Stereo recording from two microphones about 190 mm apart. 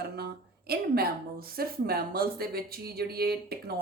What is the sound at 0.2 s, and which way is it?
Speech, 55° right (ahead or behind).